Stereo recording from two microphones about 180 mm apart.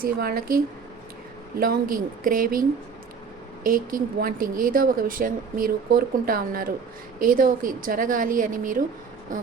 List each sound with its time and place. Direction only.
0.0 s a woman's voice: 55° right (ahead or behind)